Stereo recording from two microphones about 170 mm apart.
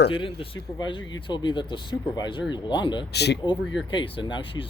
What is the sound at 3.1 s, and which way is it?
Speech, 75° left (ahead or behind).